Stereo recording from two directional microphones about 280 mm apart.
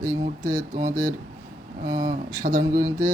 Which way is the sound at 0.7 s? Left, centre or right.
Right.